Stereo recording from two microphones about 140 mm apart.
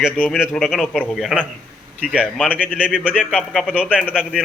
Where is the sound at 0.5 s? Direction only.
Centre (ahead or behind).